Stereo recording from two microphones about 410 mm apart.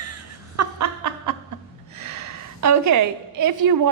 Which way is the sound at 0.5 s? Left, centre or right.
Right.